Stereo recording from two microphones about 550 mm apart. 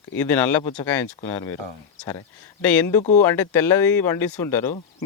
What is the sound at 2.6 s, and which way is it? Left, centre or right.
Speech, centre.